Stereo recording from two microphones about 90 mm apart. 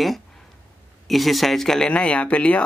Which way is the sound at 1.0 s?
Centre (ahead or behind).